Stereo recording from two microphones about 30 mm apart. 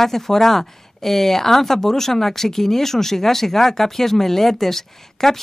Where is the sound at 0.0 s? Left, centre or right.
Centre.